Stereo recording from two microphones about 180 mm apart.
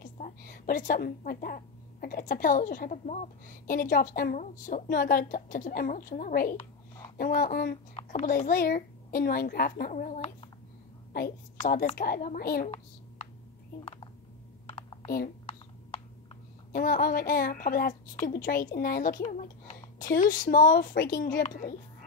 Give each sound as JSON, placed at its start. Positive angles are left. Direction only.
{"t": 0.0, "sound": "a woman's voice", "side_deg": 50}
{"t": 6.5, "sound": "a sound", "side_deg": 30}
{"t": 7.2, "sound": "a woman's voice", "side_deg": 50}
{"t": 11.1, "sound": "a woman's voice", "side_deg": 55}
{"t": 13.7, "sound": "speech", "side_deg": 25}
{"t": 14.7, "sound": "computer keyboard", "side_deg": 30}
{"t": 15.2, "sound": "a sound", "side_deg": 35}
{"t": 16.7, "sound": "a woman's voice", "side_deg": 50}